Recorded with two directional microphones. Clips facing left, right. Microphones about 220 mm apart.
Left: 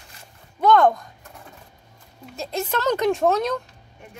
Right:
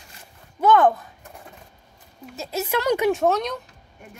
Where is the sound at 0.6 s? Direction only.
5° right (ahead or behind).